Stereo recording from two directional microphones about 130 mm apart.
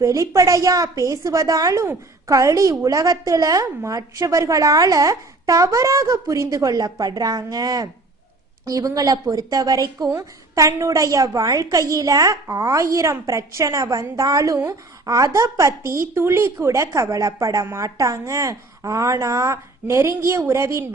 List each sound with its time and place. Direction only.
0.0 s a woman's voice: 25° right (ahead or behind)